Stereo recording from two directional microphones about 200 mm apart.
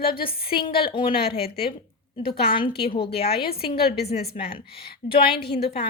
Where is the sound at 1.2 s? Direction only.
50° left (ahead or behind).